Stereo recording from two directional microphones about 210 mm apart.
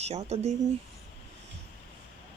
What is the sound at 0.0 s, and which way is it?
Speech, 30° right (ahead or behind).